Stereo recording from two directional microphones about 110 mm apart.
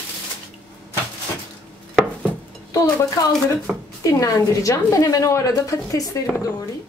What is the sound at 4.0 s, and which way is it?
A woman's voice, 30° left (ahead or behind).